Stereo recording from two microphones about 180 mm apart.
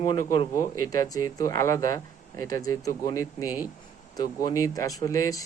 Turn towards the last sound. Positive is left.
turn(degrees=20)  # may be behind; listen again after turning